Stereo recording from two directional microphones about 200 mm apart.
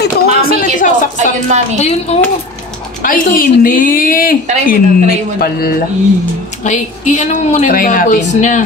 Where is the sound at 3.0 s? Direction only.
45° left (ahead or behind).